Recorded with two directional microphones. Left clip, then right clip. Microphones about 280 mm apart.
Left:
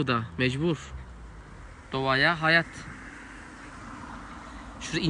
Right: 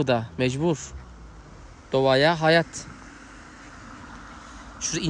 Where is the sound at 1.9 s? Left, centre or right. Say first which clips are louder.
Right 5 dB; right.